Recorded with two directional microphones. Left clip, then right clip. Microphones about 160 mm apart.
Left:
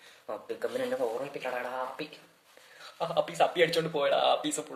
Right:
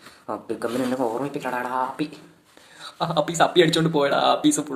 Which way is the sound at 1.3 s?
10° left (ahead or behind).